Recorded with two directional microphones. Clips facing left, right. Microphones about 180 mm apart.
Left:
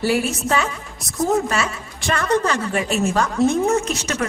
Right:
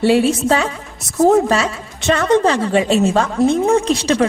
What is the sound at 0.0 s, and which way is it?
A woman's voice, 30° right (ahead or behind).